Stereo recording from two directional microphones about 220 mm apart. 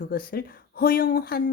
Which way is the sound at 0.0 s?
40° left (ahead or behind).